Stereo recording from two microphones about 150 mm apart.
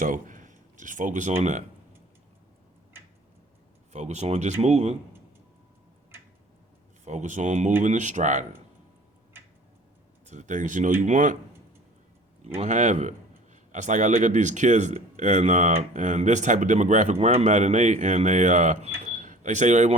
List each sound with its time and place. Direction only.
0.0 s speech: 65° right (ahead or behind)
3.9 s speech: 50° right (ahead or behind)
7.0 s speech: 55° right (ahead or behind)
10.2 s speech: 55° right (ahead or behind)
12.5 s speech: 50° right (ahead or behind)
19.0 s cash register: 55° right (ahead or behind)